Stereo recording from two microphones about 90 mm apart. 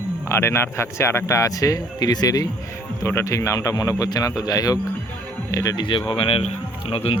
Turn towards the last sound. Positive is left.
turn(degrees=90)